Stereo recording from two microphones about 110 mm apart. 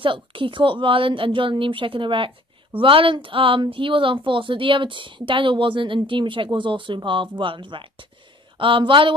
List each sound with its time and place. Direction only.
0.0 s speech: 50° right (ahead or behind)